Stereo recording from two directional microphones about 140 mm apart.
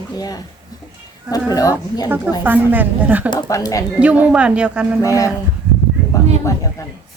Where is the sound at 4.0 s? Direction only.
10° right (ahead or behind).